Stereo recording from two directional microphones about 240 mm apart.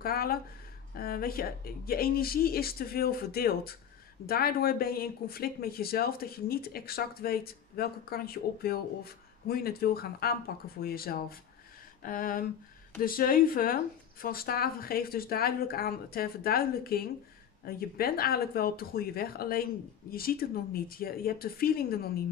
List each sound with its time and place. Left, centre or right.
0.0 s speech: left